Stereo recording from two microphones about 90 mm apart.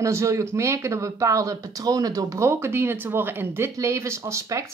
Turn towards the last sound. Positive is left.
turn(degrees=-35)  # may be behind; listen again after turning